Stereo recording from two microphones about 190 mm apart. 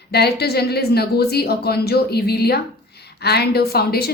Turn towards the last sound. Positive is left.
turn(degrees=55)  # may be behind; listen again after turning